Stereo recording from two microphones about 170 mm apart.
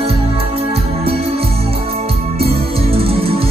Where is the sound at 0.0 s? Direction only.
35° right (ahead or behind).